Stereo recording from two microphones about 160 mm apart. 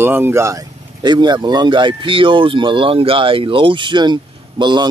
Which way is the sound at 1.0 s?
25° right (ahead or behind).